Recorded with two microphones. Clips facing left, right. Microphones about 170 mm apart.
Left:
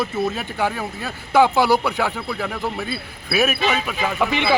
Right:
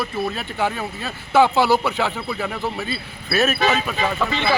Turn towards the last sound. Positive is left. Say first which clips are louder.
# left 1 dB
turn(degrees=15)  # may be behind; listen again after turning